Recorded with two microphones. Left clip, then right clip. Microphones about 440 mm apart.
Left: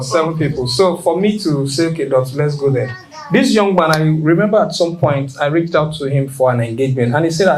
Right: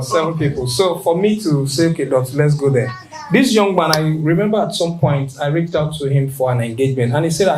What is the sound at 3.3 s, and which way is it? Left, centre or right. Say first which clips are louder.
Speech: left 1 dB; centre.